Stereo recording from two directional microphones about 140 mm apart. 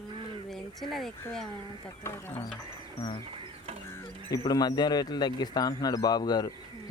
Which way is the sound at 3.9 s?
20° left (ahead or behind).